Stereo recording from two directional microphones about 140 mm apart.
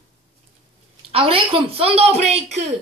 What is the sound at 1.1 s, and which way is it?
Speech, 40° right (ahead or behind).